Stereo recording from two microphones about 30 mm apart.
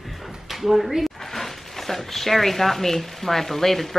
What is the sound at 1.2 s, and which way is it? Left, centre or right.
Speech, centre.